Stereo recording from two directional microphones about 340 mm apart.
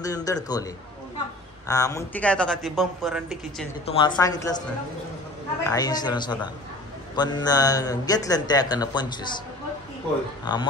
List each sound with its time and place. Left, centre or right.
0.0 s speech: centre
1.7 s speech: centre
3.8 s speech: centre
5.6 s speech: centre